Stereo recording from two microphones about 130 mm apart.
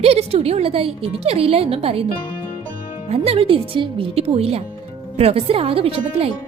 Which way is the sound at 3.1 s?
50° right (ahead or behind).